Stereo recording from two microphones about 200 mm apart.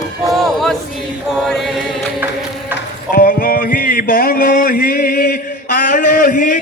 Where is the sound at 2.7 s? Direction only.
45° left (ahead or behind).